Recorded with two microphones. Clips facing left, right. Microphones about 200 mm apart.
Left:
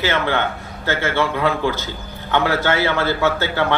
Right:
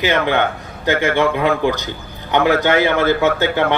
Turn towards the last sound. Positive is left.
turn(degrees=-15)  # may be behind; listen again after turning